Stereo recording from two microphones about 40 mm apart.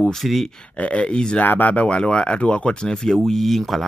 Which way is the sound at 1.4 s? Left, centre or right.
Left.